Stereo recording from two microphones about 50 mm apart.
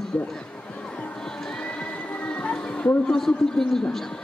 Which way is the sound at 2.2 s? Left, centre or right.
Left.